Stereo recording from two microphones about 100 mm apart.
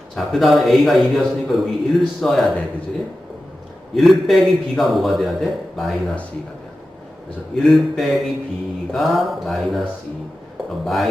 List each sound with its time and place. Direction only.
0.2 s a man's voice: centre (ahead or behind)
3.9 s a man's voice: centre (ahead or behind)
7.7 s a man's voice: centre (ahead or behind)
10.8 s a man's voice: centre (ahead or behind)